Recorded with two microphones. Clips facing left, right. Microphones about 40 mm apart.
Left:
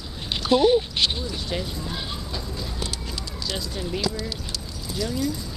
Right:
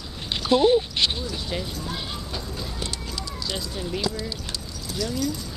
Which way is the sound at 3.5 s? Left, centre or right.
Right.